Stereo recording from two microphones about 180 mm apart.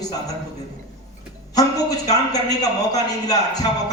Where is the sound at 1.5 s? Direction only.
20° left (ahead or behind).